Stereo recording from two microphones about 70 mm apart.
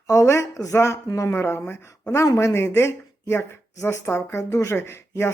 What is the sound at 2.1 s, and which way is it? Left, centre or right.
Speech, left.